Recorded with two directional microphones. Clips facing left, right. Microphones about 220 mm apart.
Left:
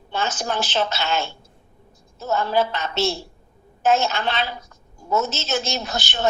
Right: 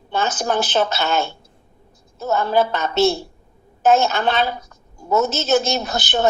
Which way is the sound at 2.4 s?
50° right (ahead or behind).